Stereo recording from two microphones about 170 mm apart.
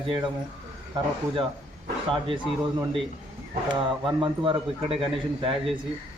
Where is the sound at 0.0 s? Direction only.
30° right (ahead or behind).